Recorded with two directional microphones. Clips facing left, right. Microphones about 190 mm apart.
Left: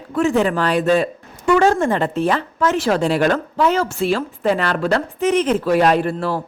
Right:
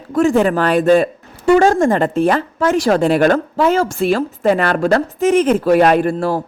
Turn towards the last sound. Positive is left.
turn(degrees=-45)  # may be behind; listen again after turning